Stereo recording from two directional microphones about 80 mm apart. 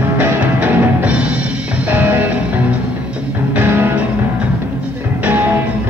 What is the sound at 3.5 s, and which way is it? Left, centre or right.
Music, right.